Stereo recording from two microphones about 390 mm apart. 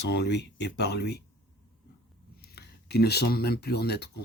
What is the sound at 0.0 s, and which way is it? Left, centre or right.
Speech, left.